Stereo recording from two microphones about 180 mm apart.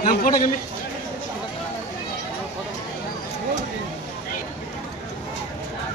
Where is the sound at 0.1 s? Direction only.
50° left (ahead or behind).